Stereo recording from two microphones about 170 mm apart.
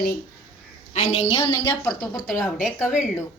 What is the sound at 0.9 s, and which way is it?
Speech, 40° left (ahead or behind).